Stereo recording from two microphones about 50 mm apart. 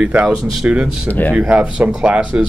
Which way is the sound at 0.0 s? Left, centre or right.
Right.